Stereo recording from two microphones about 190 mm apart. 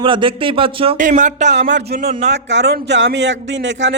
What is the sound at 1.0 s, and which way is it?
Speech, 40° right (ahead or behind).